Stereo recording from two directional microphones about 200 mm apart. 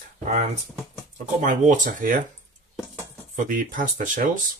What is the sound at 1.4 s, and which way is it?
Speech, 40° right (ahead or behind).